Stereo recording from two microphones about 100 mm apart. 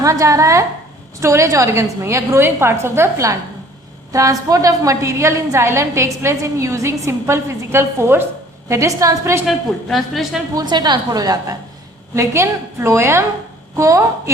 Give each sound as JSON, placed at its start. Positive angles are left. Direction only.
{"t": 0.0, "sound": "a woman's voice", "side_deg": -30}
{"t": 9.5, "sound": "a woman's voice", "side_deg": 0}
{"t": 10.5, "sound": "a woman's voice", "side_deg": -45}
{"t": 12.1, "sound": "a woman's voice", "side_deg": -30}